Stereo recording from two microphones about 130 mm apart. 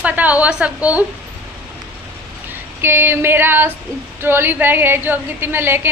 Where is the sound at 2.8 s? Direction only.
15° right (ahead or behind).